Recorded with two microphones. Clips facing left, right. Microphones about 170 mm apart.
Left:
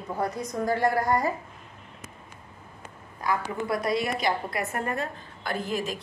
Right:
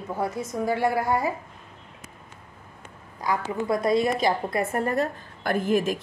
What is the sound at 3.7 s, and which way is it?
A woman's voice, 25° right (ahead or behind).